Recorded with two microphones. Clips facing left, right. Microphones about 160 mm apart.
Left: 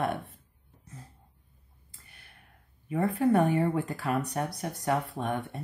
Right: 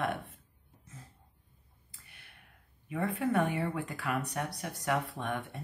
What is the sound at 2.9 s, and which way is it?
Speech, 35° left (ahead or behind).